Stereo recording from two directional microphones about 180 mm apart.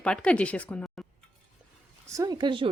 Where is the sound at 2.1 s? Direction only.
20° right (ahead or behind).